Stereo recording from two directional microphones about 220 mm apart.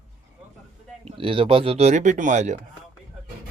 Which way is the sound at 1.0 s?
25° right (ahead or behind).